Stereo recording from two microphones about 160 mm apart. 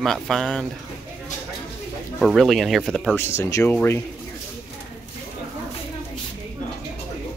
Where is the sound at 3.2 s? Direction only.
15° left (ahead or behind).